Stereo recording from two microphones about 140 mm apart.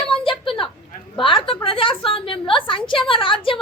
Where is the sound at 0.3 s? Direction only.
35° left (ahead or behind).